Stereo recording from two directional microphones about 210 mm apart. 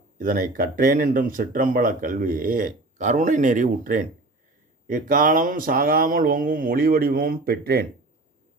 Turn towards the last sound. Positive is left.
turn(degrees=-50)  # may be behind; listen again after turning